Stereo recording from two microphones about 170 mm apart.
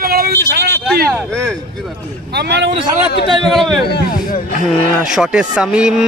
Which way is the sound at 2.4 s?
85° right.